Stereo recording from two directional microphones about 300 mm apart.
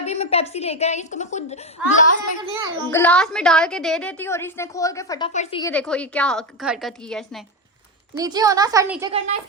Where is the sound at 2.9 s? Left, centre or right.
Centre.